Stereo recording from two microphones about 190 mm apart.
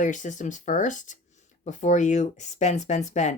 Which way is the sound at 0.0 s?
40° left (ahead or behind).